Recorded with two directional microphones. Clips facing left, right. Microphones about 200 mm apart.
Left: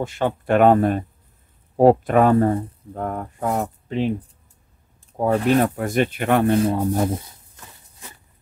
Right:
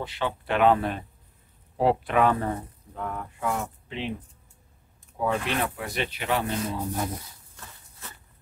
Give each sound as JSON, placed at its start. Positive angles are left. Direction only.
{"t": 0.0, "sound": "speech", "side_deg": 45}